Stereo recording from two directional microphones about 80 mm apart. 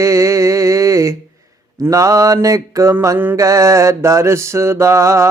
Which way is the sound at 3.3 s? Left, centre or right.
Right.